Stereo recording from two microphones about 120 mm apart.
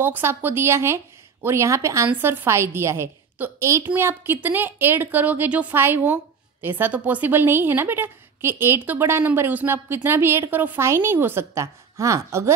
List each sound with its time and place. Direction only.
0.0 s a woman's voice: 20° right (ahead or behind)